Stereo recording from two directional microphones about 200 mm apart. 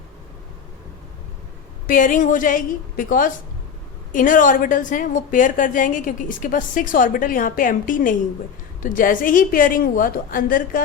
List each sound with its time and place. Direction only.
1.9 s a woman's voice: 40° left (ahead or behind)